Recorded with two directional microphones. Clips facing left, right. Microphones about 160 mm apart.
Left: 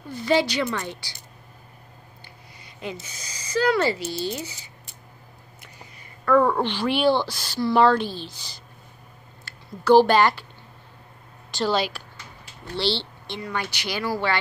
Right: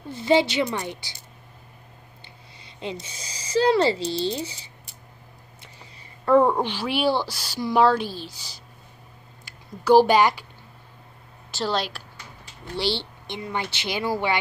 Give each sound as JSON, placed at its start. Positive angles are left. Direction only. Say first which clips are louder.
{"t": 0.1, "sound": "speech", "louder": "right 2 dB", "side_deg": -25}
{"t": 2.6, "sound": "speech", "louder": "right 1 dB", "side_deg": -25}
{"t": 4.0, "sound": "speech", "louder": "right 3 dB", "side_deg": 5}
{"t": 4.3, "sound": "speech", "louder": "right 2 dB", "side_deg": -30}
{"t": 5.6, "sound": "a sound", "louder": "left 2 dB", "side_deg": -30}
{"t": 6.6, "sound": "speech", "louder": "left 2 dB", "side_deg": -5}
{"t": 11.5, "sound": "speech", "louder": "left 3 dB", "side_deg": 0}
{"t": 12.7, "sound": "speech", "louder": "left 1 dB", "side_deg": -15}